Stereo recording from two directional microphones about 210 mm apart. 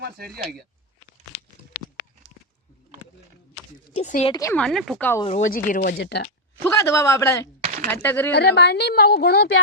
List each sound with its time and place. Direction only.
0.0 s speech: 50° right (ahead or behind)
4.0 s speech: 35° left (ahead or behind)
4.3 s a man's voice: 15° left (ahead or behind)
4.6 s speech: centre (ahead or behind)
5.6 s a woman's voice: 40° left (ahead or behind)
6.6 s a man's voice: 10° left (ahead or behind)
7.6 s a sound: 35° right (ahead or behind)
7.9 s a man's voice: 10° left (ahead or behind)
8.3 s a woman's voice: 50° left (ahead or behind)